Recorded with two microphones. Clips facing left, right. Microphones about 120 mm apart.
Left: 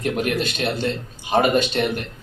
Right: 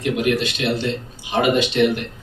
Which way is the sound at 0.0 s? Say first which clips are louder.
Right 2 dB; 45° left (ahead or behind).